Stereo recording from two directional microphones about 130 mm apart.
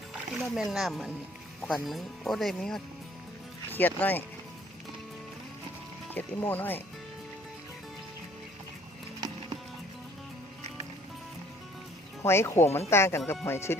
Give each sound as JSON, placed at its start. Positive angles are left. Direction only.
{"t": 0.1, "sound": "speech", "side_deg": -5}
{"t": 6.1, "sound": "speech", "side_deg": 15}
{"t": 12.2, "sound": "speech", "side_deg": 20}